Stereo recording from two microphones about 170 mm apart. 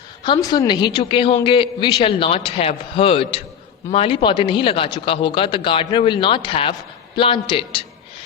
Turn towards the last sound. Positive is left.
turn(degrees=30)  # may be behind; listen again after turning